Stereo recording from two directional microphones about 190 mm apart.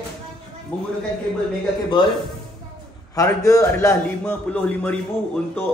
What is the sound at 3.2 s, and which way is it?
A man's voice, 15° left (ahead or behind).